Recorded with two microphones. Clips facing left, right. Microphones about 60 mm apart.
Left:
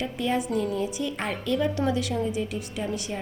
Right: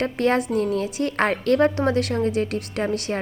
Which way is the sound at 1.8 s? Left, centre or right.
Right.